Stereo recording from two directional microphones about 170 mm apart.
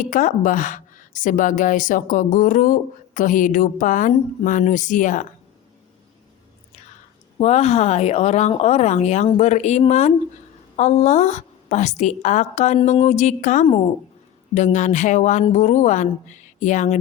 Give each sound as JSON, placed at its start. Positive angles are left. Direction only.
{"t": 0.0, "sound": "a woman's voice", "side_deg": 50}
{"t": 7.3, "sound": "a woman's voice", "side_deg": 40}
{"t": 13.7, "sound": "speech", "side_deg": 35}
{"t": 14.5, "sound": "a woman's voice", "side_deg": 45}